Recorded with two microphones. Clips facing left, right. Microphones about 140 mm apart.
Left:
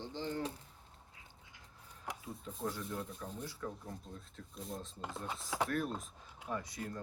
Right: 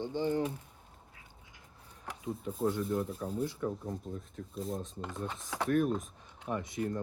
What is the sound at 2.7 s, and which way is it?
Speech, 30° right (ahead or behind).